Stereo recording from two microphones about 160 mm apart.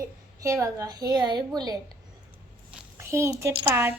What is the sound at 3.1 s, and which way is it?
Speech, 15° right (ahead or behind).